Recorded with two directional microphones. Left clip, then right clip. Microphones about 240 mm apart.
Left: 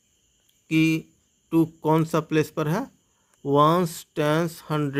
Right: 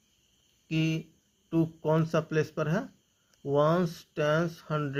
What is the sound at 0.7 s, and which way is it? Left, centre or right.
Speech, left.